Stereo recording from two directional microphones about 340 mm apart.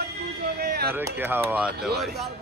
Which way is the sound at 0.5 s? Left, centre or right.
Right.